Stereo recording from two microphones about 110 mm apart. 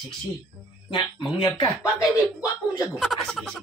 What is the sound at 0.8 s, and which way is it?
Speech, 45° left (ahead or behind).